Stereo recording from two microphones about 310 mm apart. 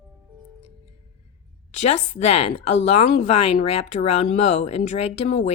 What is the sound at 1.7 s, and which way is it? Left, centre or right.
A woman's voice, left.